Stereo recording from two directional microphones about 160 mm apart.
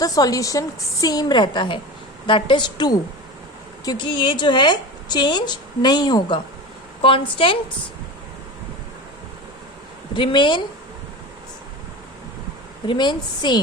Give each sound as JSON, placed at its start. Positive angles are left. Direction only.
{"t": 0.0, "sound": "a woman's voice", "side_deg": 20}
{"t": 10.2, "sound": "a woman's voice", "side_deg": 30}
{"t": 12.9, "sound": "a woman's voice", "side_deg": 30}